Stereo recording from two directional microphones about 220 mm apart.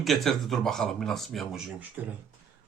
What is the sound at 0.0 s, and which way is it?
Speech, centre (ahead or behind).